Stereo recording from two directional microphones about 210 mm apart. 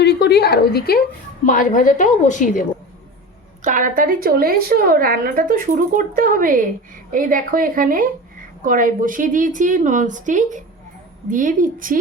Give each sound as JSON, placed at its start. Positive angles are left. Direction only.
{"t": 0.0, "sound": "a sound", "side_deg": 50}
{"t": 1.5, "sound": "a woman's voice", "side_deg": 40}
{"t": 3.6, "sound": "a woman's voice", "side_deg": -40}